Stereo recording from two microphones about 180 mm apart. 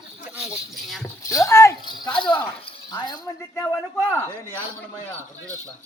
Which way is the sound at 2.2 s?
25° left (ahead or behind).